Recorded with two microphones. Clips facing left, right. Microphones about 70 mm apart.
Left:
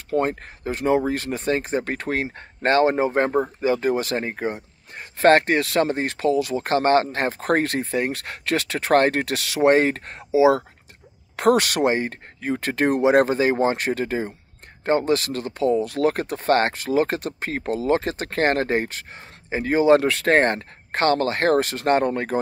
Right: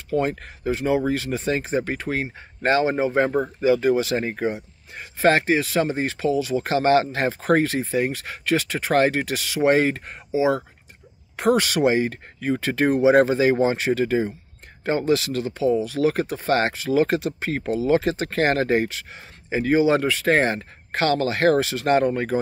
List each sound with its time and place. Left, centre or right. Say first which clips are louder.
0.1 s speech: left 1 dB; left
3.3 s speech: left 1 dB; centre
3.6 s speech: right 6 dB; left
4.9 s speech: left 3 dB; left
11.3 s speech: left 1 dB; left
20.0 s speech: left 1 dB; left